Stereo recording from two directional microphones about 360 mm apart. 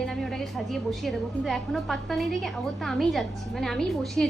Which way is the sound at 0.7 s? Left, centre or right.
Centre.